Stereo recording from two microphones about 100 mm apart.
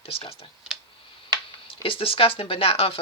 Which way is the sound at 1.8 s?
60° left (ahead or behind).